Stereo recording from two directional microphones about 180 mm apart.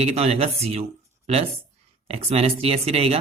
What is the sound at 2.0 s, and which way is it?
Speech, 35° right (ahead or behind).